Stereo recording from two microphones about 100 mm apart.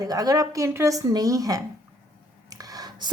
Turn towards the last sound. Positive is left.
turn(degrees=-40)  # may be behind; listen again after turning